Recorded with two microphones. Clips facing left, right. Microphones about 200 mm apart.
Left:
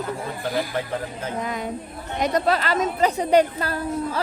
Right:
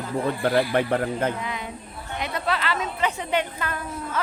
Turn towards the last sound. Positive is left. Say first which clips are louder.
# left 5 dB
turn(degrees=35)  # may be behind; listen again after turning